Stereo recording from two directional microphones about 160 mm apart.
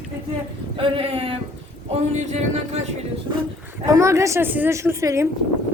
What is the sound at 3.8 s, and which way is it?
A woman's voice, 20° right (ahead or behind).